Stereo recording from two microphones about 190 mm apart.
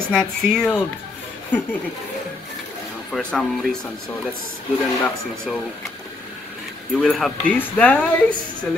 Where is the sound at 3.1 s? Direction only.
Centre (ahead or behind).